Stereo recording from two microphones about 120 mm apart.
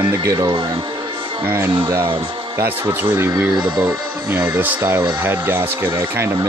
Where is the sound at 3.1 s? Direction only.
20° right (ahead or behind).